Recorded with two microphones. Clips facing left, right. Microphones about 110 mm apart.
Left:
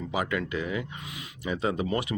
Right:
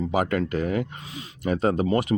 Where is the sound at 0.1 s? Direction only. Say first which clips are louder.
Right 3 dB; 45° right (ahead or behind).